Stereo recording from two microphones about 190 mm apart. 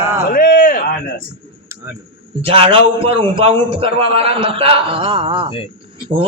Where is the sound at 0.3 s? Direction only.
55° left (ahead or behind).